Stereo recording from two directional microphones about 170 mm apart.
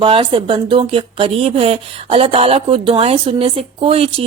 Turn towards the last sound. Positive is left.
turn(degrees=-35)  # may be behind; listen again after turning